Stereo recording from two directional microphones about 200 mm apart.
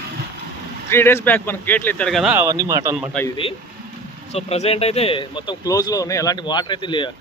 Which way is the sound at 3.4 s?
30° left (ahead or behind).